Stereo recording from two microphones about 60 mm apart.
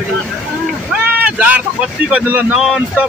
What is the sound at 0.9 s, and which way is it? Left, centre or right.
Speech, right.